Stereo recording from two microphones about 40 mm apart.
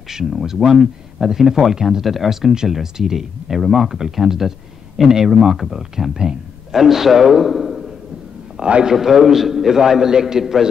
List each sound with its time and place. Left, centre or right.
0.1 s a man's voice: centre
8.6 s a man's voice: right
8.9 s speech: centre